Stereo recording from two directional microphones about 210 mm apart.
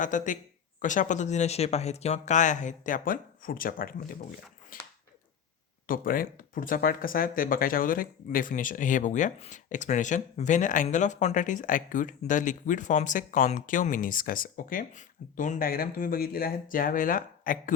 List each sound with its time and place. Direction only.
0.0 s speech: 40° left (ahead or behind)
4.7 s a sound: 40° left (ahead or behind)
5.9 s speech: 40° left (ahead or behind)